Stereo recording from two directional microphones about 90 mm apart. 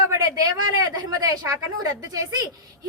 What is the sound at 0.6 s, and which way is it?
A woman's voice, 50° right (ahead or behind).